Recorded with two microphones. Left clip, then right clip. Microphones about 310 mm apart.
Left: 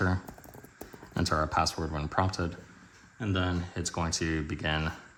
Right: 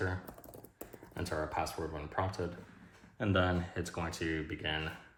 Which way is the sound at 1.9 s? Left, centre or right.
Left.